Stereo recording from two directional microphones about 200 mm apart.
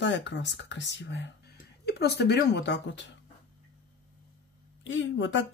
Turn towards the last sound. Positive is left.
turn(degrees=70)  # may be behind; listen again after turning